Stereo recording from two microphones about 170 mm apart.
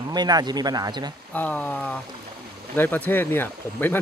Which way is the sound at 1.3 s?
10° left (ahead or behind).